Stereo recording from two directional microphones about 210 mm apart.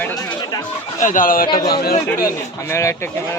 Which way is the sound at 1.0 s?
40° left (ahead or behind).